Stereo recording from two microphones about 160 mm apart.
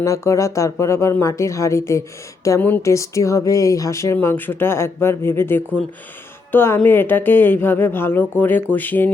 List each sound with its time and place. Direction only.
0.0 s speech: 20° left (ahead or behind)